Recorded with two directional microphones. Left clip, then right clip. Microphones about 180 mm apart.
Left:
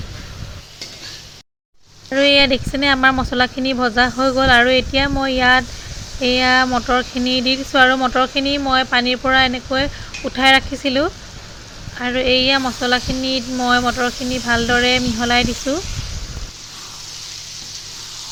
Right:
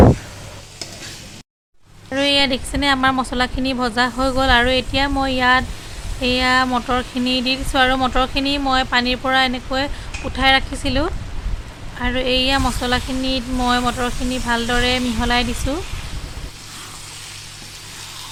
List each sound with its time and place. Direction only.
2.0 s speech: 15° left (ahead or behind)